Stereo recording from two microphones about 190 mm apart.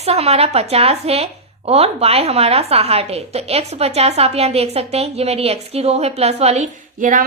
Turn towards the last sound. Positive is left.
turn(degrees=-45)  # may be behind; listen again after turning